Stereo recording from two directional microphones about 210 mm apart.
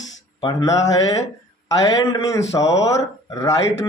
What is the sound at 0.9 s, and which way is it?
A man's voice, 15° left (ahead or behind).